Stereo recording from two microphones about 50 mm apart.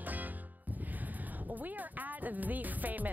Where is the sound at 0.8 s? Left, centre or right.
Right.